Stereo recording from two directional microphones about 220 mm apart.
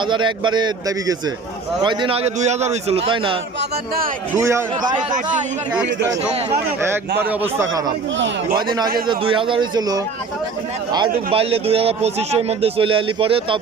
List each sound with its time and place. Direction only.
0.1 s a man's voice: 20° right (ahead or behind)
4.4 s a man's voice: 15° right (ahead or behind)
7.2 s a man's voice: 10° right (ahead or behind)
9.0 s a man's voice: 20° right (ahead or behind)
11.3 s a man's voice: 25° right (ahead or behind)